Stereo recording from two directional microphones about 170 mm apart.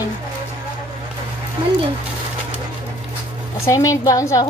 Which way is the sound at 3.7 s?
20° left (ahead or behind).